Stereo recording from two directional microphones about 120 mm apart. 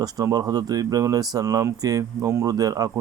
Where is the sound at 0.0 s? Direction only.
30° right (ahead or behind).